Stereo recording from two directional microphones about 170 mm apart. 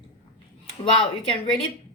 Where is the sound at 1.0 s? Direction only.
5° left (ahead or behind).